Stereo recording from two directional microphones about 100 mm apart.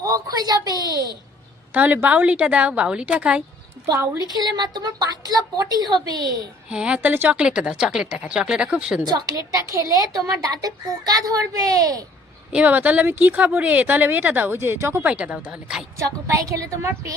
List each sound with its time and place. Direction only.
0.0 s a sound: 35° right (ahead or behind)
1.7 s speech: 15° right (ahead or behind)
3.9 s a woman's voice: 25° right (ahead or behind)
4.3 s a child's voice: 45° right (ahead or behind)
6.7 s speech: 10° right (ahead or behind)
9.0 s a child's voice: 40° right (ahead or behind)
12.5 s speech: 15° right (ahead or behind)
16.0 s a child's voice: 35° right (ahead or behind)